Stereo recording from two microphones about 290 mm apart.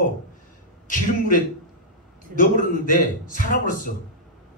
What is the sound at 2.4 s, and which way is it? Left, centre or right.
Speech, left.